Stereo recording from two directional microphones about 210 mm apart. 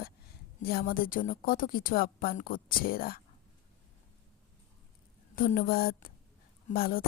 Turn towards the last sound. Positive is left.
turn(degrees=45)  # may be behind; listen again after turning